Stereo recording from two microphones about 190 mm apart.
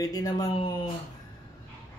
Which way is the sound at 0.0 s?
20° left (ahead or behind).